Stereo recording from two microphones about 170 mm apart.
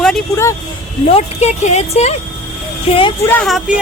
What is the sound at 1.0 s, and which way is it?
Speech, 40° left (ahead or behind).